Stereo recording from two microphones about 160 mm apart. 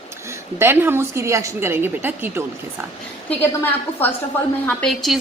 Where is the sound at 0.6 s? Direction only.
15° right (ahead or behind).